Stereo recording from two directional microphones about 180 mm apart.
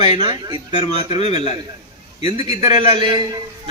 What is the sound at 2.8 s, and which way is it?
Speech, 25° right (ahead or behind).